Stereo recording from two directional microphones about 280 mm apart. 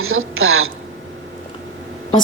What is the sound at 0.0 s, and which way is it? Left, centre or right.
Speech, right.